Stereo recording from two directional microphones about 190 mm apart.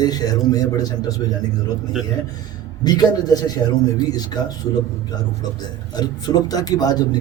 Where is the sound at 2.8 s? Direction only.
20° left (ahead or behind).